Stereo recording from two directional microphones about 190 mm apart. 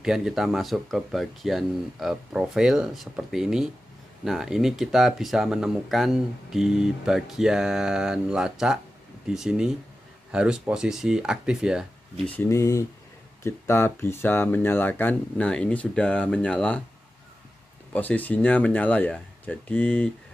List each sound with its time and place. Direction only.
0.0 s speech: centre (ahead or behind)
12.3 s speech: 15° left (ahead or behind)
17.9 s speech: 10° left (ahead or behind)